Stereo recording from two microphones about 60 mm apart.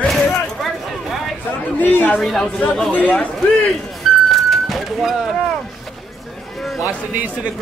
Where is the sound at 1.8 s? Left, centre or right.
Left.